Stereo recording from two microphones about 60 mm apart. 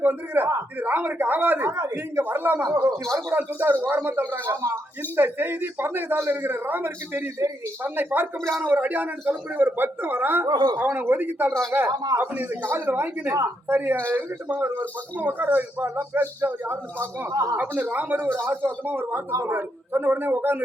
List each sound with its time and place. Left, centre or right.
0.0 s a man's voice: right
1.7 s speech: right
2.2 s a man's voice: right
3.2 s a man's voice: right
17.3 s speech: right
17.6 s a man's voice: right